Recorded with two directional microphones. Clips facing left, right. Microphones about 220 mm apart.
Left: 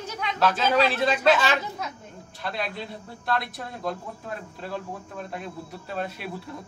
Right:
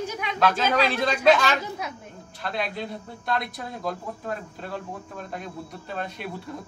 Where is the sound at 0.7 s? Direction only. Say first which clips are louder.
Left 1 dB; 5° left (ahead or behind).